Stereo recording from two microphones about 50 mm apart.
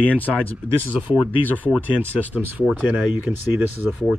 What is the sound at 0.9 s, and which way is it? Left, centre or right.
Speech, right.